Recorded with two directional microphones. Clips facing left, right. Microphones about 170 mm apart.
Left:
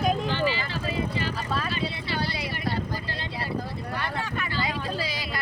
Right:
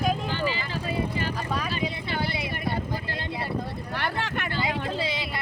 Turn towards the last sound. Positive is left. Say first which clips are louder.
# right 2 dB
turn(degrees=-25)  # may be behind; listen again after turning